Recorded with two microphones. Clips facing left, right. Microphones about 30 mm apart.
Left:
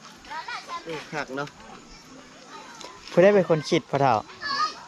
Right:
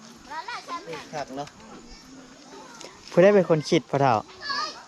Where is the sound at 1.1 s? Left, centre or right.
Left.